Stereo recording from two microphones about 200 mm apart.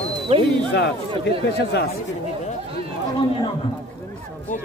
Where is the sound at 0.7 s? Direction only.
55° left (ahead or behind).